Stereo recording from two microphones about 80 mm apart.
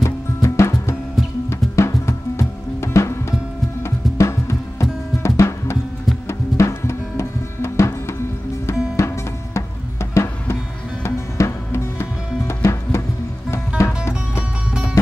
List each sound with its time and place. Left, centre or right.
0.0 s music: left